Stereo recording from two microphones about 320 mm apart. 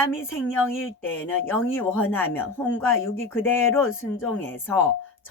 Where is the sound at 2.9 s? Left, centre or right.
Left.